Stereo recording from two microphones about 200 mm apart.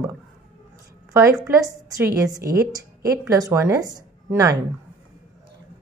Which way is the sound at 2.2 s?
15° right (ahead or behind).